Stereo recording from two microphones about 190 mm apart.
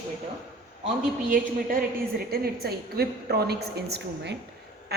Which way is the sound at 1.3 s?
50° right (ahead or behind).